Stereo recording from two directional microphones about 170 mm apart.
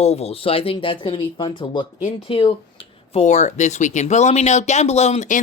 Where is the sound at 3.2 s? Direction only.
45° left (ahead or behind).